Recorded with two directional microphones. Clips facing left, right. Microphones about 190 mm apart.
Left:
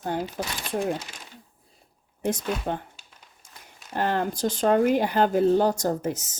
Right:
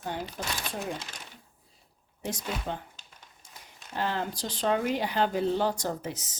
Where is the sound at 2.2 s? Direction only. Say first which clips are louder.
Left 7 dB; 55° left (ahead or behind).